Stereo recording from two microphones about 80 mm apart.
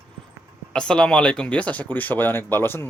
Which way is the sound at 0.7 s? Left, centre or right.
Centre.